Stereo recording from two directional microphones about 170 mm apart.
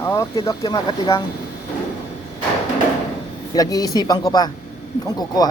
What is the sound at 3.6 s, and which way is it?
Speech, 20° left (ahead or behind).